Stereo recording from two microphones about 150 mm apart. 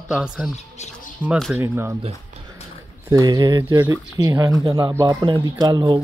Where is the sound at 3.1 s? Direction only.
25° right (ahead or behind).